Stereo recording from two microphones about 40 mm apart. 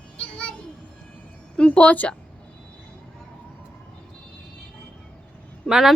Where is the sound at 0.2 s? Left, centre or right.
Left.